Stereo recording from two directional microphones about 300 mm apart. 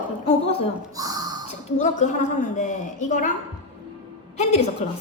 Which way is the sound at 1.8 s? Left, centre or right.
Left.